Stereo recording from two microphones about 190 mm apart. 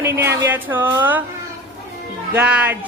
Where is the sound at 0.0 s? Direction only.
10° right (ahead or behind).